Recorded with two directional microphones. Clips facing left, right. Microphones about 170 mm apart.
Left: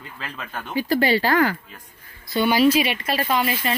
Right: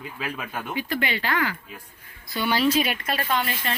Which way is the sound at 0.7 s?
35° left (ahead or behind).